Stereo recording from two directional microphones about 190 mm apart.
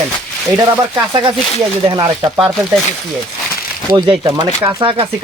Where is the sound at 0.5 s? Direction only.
15° right (ahead or behind).